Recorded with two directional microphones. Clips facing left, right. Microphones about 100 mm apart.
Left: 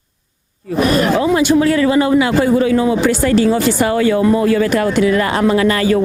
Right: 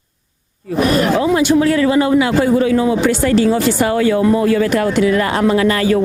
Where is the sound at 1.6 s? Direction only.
20° left (ahead or behind).